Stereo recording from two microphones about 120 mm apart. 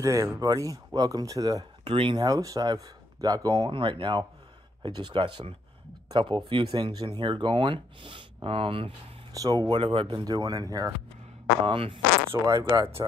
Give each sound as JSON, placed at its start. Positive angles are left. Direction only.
{"t": 0.0, "sound": "speech", "side_deg": -25}
{"t": 1.9, "sound": "speech", "side_deg": -45}
{"t": 9.3, "sound": "speech", "side_deg": -30}
{"t": 11.6, "sound": "speech", "side_deg": -45}
{"t": 12.4, "sound": "speech", "side_deg": -30}